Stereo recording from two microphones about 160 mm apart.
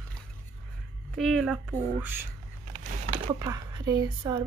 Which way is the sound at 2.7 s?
50° right (ahead or behind).